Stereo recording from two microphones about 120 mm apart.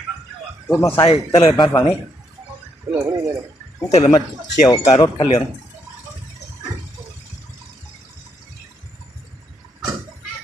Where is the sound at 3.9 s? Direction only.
60° left (ahead or behind).